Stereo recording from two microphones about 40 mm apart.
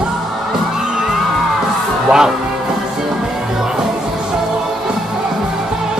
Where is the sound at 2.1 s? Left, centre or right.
Centre.